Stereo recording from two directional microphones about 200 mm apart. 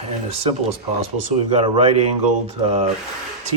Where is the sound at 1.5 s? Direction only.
30° right (ahead or behind).